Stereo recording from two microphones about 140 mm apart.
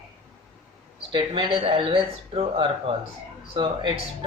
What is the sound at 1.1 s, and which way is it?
Speech, 35° right (ahead or behind).